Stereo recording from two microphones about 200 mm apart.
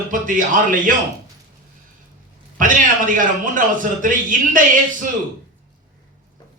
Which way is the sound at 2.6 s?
40° right (ahead or behind).